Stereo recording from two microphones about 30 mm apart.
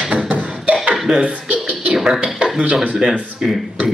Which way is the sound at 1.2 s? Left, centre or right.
Right.